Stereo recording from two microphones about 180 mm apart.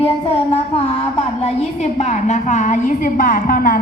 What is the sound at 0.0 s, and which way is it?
A woman's voice, 35° left (ahead or behind).